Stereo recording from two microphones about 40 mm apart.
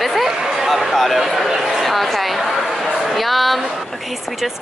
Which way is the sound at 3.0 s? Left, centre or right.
Centre.